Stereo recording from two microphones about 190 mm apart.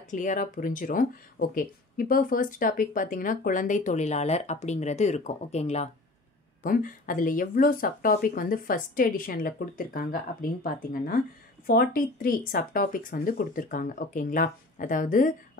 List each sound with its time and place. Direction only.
0.1 s speech: 40° left (ahead or behind)
6.6 s speech: 45° left (ahead or behind)